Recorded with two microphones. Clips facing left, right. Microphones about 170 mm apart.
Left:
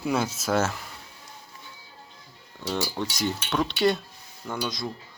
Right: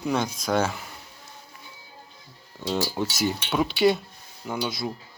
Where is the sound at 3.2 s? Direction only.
5° right (ahead or behind).